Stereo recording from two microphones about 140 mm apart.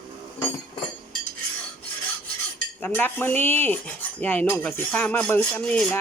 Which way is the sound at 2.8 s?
15° left (ahead or behind).